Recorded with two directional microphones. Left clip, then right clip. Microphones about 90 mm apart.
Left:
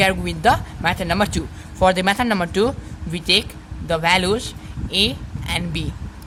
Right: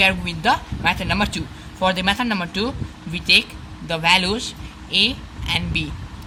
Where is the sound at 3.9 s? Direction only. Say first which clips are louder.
Even; 45° left (ahead or behind).